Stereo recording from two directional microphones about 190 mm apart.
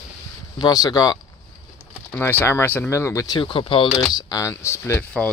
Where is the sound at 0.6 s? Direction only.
20° left (ahead or behind).